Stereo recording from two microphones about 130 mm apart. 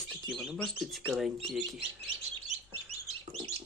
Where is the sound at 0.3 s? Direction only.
5° right (ahead or behind).